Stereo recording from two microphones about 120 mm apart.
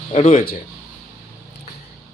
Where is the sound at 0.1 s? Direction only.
50° left (ahead or behind).